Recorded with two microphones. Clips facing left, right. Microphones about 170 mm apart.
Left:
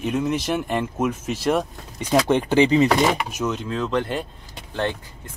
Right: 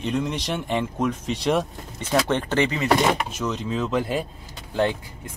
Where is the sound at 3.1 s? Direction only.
5° left (ahead or behind).